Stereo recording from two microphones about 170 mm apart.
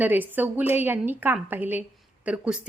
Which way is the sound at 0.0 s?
10° right (ahead or behind).